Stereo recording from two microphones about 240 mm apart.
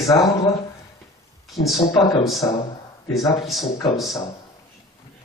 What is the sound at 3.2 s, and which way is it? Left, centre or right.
Speech, left.